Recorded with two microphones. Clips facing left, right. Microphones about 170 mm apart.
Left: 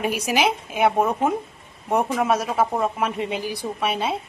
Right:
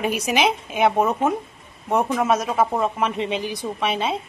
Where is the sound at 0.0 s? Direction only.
5° left (ahead or behind).